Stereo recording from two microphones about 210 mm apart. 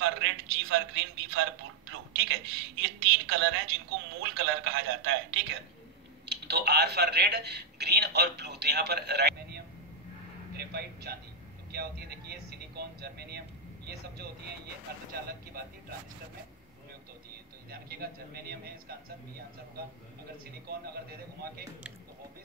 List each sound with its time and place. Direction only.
0.0 s a man's voice: 60° right (ahead or behind)
10.6 s speech: 50° right (ahead or behind)
17.6 s speech: 45° right (ahead or behind)